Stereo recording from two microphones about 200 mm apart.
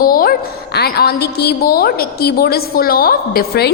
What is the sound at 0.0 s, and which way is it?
A woman's voice, 45° left (ahead or behind).